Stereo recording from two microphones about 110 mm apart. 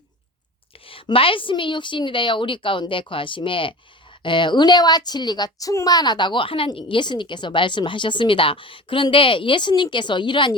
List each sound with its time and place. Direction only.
0.9 s a woman's voice: 55° left (ahead or behind)